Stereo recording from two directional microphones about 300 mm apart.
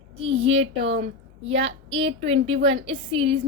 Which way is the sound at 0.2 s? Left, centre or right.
Centre.